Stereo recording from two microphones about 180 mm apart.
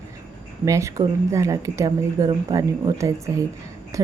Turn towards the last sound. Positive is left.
turn(degrees=-15)  # may be behind; listen again after turning